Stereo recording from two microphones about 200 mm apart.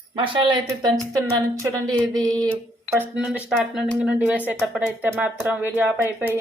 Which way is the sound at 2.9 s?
5° right (ahead or behind).